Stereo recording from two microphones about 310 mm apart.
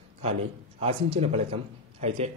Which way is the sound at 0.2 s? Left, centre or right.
Centre.